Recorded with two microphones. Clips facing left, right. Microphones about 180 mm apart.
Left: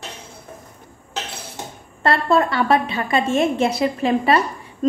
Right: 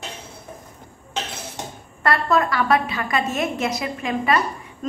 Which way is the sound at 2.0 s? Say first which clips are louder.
Left 2 dB; 30° left (ahead or behind).